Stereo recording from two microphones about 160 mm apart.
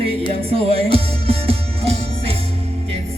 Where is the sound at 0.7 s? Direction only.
35° right (ahead or behind).